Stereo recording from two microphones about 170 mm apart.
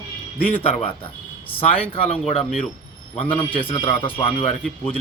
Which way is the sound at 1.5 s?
35° left (ahead or behind).